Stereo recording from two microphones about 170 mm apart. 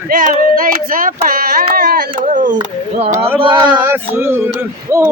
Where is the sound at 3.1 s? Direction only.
15° right (ahead or behind).